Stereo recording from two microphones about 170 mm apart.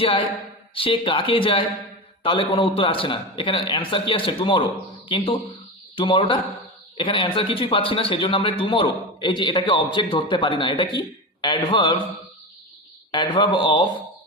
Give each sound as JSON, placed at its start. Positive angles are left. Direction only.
{"t": 0.0, "sound": "a man's voice", "side_deg": 30}
{"t": 13.1, "sound": "a man's voice", "side_deg": 30}